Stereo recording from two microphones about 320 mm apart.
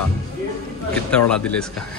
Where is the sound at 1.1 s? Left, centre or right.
Centre.